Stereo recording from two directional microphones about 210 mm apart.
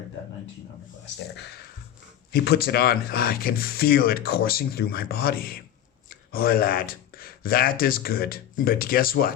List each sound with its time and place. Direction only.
2.3 s speech: 50° left (ahead or behind)